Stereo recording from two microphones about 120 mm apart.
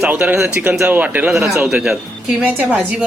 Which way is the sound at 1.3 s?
Centre (ahead or behind).